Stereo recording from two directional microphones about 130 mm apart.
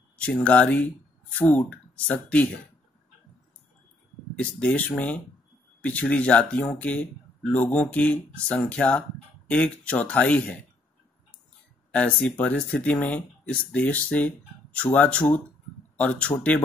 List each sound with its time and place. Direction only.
0.2 s speech: 10° left (ahead or behind)
4.4 s speech: 10° left (ahead or behind)
11.9 s speech: 10° left (ahead or behind)